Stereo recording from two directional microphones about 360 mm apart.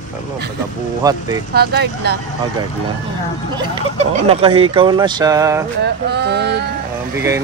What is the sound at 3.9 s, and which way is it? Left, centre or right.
Speech, centre.